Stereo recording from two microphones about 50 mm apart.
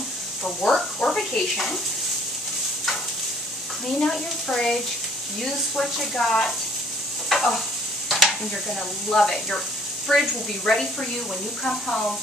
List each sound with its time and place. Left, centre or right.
0.4 s speech: centre
3.8 s speech: centre
7.2 s stir: centre
8.1 s a sound: centre
9.1 s speech: centre